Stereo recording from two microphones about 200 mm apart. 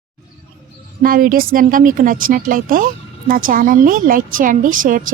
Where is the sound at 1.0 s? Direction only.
45° right (ahead or behind).